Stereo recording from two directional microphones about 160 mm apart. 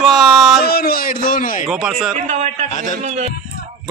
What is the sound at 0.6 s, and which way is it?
Speech, 70° left (ahead or behind).